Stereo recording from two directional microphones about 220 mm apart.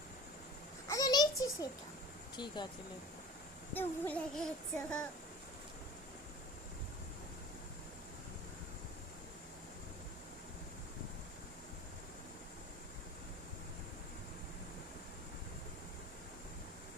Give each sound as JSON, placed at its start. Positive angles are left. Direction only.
{"t": 0.9, "sound": "a sound", "side_deg": 15}
{"t": 2.3, "sound": "speech", "side_deg": 20}
{"t": 3.8, "sound": "child singing", "side_deg": 5}